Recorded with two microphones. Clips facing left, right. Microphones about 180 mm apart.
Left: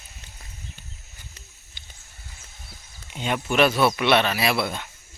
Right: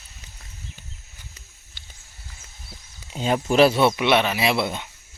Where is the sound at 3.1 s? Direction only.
35° right (ahead or behind).